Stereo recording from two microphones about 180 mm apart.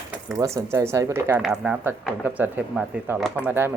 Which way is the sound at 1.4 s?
Centre (ahead or behind).